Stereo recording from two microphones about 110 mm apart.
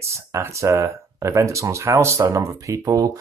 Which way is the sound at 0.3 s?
25° right (ahead or behind).